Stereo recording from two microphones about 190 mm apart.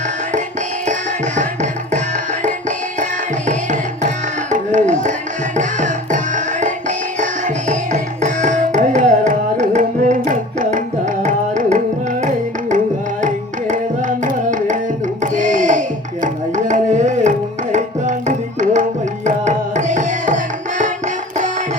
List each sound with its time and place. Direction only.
0.9 s music: 40° right (ahead or behind)
2.4 s tabla: 40° right (ahead or behind)
4.5 s music: 40° right (ahead or behind)
14.3 s music: 40° right (ahead or behind)
16.2 s tabla: 40° right (ahead or behind)